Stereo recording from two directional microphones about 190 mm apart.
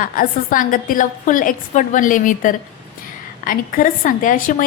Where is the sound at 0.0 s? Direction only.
45° left (ahead or behind).